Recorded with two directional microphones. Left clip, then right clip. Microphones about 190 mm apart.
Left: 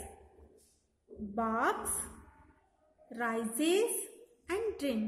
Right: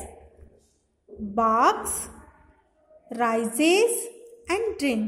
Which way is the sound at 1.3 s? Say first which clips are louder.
Right 12 dB; 20° right (ahead or behind).